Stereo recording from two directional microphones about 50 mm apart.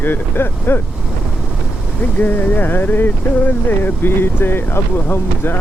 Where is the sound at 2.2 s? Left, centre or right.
Left.